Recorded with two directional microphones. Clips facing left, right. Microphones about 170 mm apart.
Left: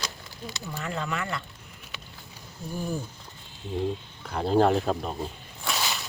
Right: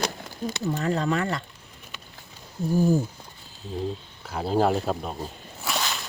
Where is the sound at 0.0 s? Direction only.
55° right (ahead or behind).